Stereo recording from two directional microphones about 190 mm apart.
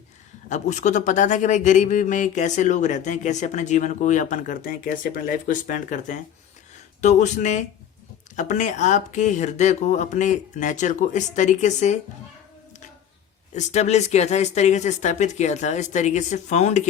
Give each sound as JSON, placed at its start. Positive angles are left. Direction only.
{"t": 0.4, "sound": "a man's voice", "side_deg": 40}
{"t": 13.5, "sound": "a man's voice", "side_deg": 40}